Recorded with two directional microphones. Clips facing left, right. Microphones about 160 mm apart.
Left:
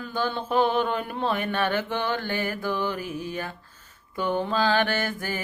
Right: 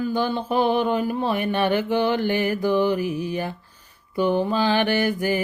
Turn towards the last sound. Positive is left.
turn(degrees=-15)  # may be behind; listen again after turning